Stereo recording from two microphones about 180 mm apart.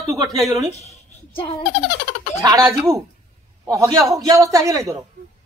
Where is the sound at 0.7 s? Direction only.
35° left (ahead or behind).